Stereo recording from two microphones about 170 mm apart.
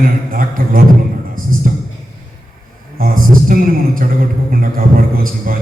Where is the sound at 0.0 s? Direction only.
55° right (ahead or behind).